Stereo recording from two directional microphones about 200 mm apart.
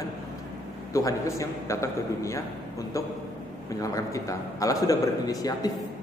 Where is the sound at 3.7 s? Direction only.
15° left (ahead or behind).